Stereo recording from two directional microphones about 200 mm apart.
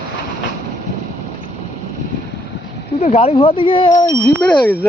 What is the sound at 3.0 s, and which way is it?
Speech, 30° left (ahead or behind).